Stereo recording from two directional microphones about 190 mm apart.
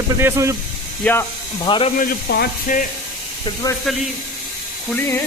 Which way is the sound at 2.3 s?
60° left (ahead or behind).